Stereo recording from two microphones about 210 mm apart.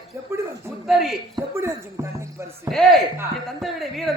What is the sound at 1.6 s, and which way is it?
Speech, 10° right (ahead or behind).